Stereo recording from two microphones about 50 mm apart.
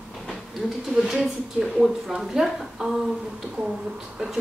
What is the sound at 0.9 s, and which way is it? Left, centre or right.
A woman's voice, centre.